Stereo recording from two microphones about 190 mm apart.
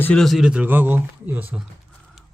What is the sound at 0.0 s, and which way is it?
Speech, 5° left (ahead or behind).